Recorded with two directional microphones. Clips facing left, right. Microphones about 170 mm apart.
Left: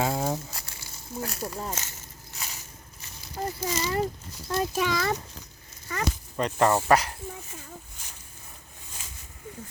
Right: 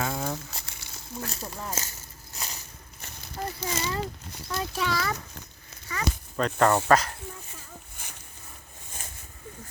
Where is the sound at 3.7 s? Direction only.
60° right (ahead or behind).